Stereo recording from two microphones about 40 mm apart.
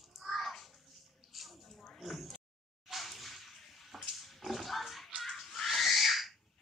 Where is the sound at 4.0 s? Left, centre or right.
Centre.